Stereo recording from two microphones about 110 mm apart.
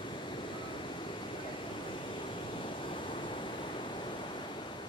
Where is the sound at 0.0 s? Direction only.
45° left (ahead or behind).